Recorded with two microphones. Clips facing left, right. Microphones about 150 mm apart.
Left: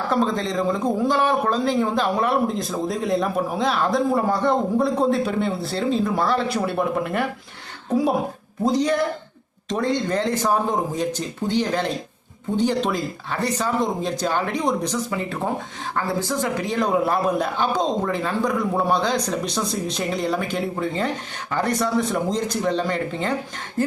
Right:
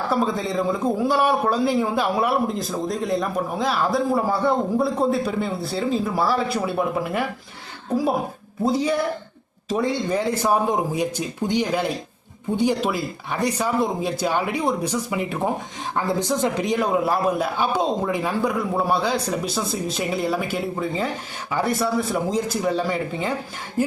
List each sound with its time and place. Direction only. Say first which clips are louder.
0.1 s a woman's voice: left 1 dB; 5° right (ahead or behind)
16.7 s speech: left 4 dB; 5° right (ahead or behind)